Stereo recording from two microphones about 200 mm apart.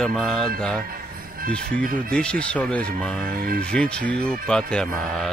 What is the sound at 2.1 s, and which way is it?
Speech, 5° left (ahead or behind).